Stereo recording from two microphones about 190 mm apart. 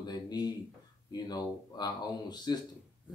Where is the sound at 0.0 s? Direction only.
20° left (ahead or behind).